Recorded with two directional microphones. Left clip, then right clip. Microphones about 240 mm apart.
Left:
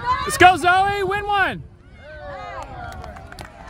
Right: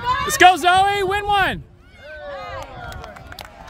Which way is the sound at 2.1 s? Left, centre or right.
Right.